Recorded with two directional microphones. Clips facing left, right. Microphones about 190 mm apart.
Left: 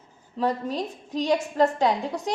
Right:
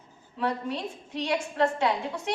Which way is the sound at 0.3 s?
40° left (ahead or behind).